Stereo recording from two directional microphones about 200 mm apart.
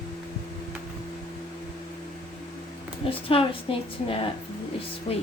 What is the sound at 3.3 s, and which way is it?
A woman's voice, 30° left (ahead or behind).